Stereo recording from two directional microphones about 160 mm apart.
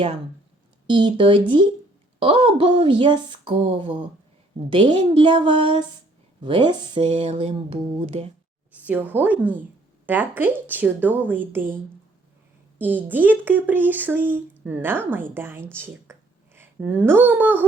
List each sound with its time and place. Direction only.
0.9 s speech: 30° right (ahead or behind)
8.7 s speech: 10° right (ahead or behind)
12.8 s speech: 10° right (ahead or behind)